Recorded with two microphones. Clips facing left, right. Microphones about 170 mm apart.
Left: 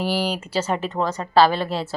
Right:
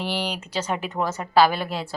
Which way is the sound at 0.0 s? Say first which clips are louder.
Left 4 dB; 5° left (ahead or behind).